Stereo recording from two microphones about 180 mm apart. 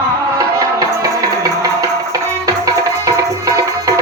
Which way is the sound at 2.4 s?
20° right (ahead or behind).